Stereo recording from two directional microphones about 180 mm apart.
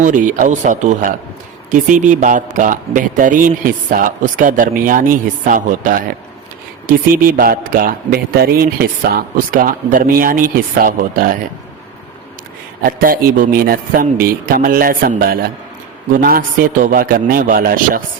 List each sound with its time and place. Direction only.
0.0 s a man's voice: 45° right (ahead or behind)
12.8 s a man's voice: 55° right (ahead or behind)